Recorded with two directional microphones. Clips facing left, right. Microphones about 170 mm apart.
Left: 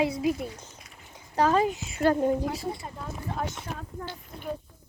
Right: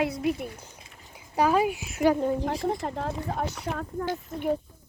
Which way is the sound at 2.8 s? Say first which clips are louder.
Right 8 dB; 90° right.